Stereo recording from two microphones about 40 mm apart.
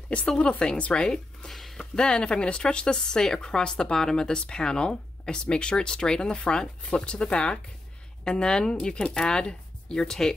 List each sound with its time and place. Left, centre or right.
0.6 s speech: left
1.0 s speech: centre
1.6 s a sound: centre
2.0 s speech: left
10.0 s speech: centre